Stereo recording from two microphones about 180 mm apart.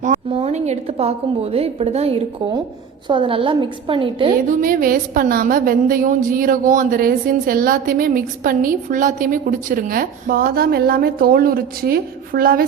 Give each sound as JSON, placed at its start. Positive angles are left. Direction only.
{"t": 0.3, "sound": "a woman's voice", "side_deg": -35}
{"t": 4.4, "sound": "a woman's voice", "side_deg": -50}